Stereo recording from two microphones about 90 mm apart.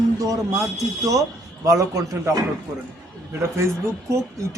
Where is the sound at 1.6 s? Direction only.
40° right (ahead or behind).